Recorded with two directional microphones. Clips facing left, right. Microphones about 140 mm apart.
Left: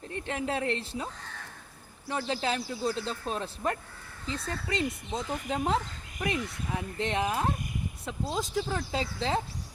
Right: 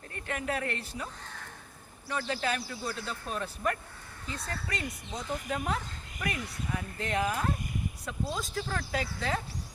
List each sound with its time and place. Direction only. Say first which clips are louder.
0.1 s speech: left 2 dB; 25° left (ahead or behind)
2.0 s speech: left 2 dB; 25° left (ahead or behind)